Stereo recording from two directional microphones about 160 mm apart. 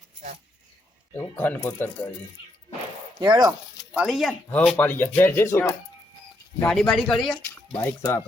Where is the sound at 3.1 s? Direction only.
25° right (ahead or behind).